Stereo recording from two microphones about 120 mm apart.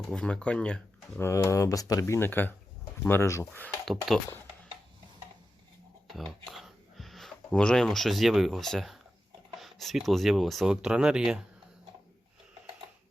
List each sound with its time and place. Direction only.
0.1 s speech: 10° left (ahead or behind)
1.2 s speech: 25° left (ahead or behind)
6.1 s speech: centre (ahead or behind)